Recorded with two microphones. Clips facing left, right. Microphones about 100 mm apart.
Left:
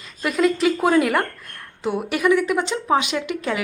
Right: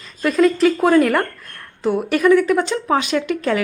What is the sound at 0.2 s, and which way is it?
A woman's voice, 15° left (ahead or behind).